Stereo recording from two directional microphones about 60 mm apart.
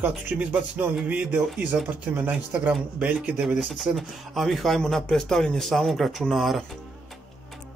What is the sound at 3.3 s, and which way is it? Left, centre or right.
A man's voice, centre.